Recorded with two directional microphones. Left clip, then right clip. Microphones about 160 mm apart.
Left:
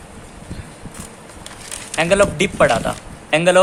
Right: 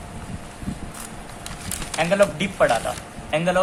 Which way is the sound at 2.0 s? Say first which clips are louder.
Left 4 dB; 75° left (ahead or behind).